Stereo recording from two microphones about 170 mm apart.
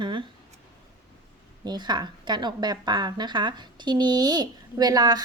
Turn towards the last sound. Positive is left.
turn(degrees=-25)  # may be behind; listen again after turning